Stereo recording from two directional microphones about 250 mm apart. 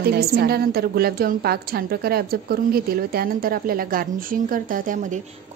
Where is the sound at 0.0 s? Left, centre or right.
Right.